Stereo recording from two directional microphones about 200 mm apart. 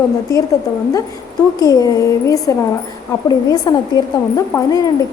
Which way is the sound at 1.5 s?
20° left (ahead or behind).